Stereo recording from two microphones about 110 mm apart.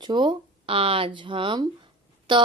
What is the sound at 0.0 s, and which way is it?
Speech, 45° right (ahead or behind).